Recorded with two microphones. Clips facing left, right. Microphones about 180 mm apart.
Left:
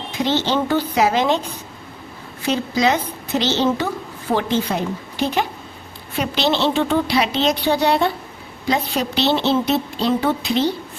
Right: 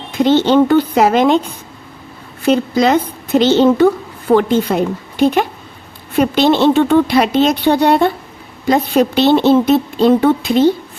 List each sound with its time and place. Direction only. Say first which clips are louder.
0.1 s speech: right 9 dB; 55° right (ahead or behind)
2.4 s a woman's voice: right 6 dB; 55° right (ahead or behind)